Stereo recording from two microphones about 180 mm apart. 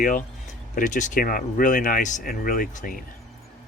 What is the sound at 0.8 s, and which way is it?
Speech, 45° left (ahead or behind).